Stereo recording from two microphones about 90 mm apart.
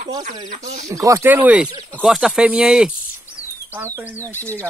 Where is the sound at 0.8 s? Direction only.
35° right (ahead or behind).